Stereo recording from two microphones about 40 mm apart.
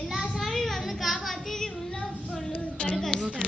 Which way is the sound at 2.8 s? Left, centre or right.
Left.